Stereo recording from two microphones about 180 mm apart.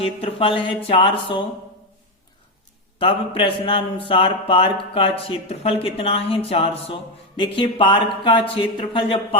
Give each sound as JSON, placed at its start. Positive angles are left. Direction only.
{"t": 0.0, "sound": "speech", "side_deg": 30}
{"t": 3.0, "sound": "speech", "side_deg": 30}